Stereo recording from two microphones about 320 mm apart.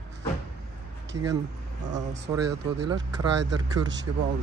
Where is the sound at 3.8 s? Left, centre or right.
Right.